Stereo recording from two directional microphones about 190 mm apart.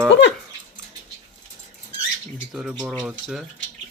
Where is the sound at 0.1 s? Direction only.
65° left (ahead or behind).